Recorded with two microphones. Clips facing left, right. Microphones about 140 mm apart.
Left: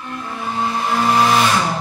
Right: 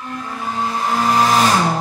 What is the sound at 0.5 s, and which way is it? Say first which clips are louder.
Vehicle: even; 40° right (ahead or behind).